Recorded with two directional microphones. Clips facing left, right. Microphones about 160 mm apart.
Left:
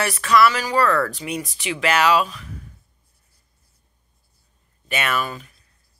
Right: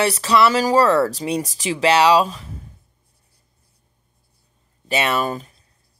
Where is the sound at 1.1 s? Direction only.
35° right (ahead or behind).